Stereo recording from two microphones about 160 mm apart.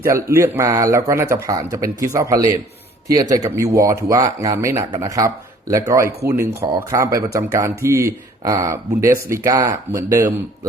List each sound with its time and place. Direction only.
0.0 s speech: 15° right (ahead or behind)